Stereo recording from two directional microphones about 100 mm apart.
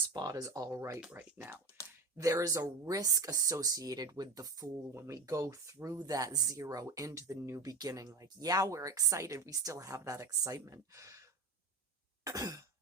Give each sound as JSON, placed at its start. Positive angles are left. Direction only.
{"t": 0.1, "sound": "speech", "side_deg": -40}
{"t": 1.4, "sound": "speech", "side_deg": -20}
{"t": 2.1, "sound": "speech", "side_deg": -35}
{"t": 12.2, "sound": "throat clearing", "side_deg": -35}